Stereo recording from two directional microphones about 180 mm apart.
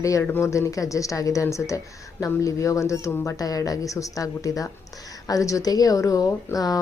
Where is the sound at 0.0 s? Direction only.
15° left (ahead or behind).